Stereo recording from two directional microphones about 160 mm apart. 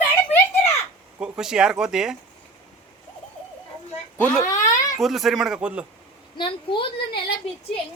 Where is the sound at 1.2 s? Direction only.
5° right (ahead or behind).